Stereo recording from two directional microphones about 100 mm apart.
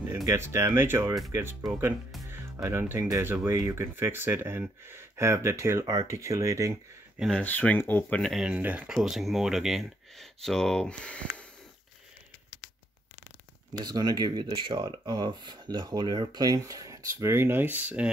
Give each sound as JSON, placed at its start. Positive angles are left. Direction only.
{"t": 0.2, "sound": "speech", "side_deg": -30}
{"t": 7.2, "sound": "speech", "side_deg": 0}
{"t": 7.4, "sound": "speech", "side_deg": 15}
{"t": 8.2, "sound": "speech", "side_deg": 0}
{"t": 8.5, "sound": "speech", "side_deg": -15}
{"t": 13.7, "sound": "speech", "side_deg": -40}